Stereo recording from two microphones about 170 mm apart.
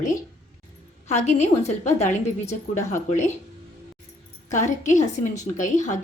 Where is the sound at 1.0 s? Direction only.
40° left (ahead or behind).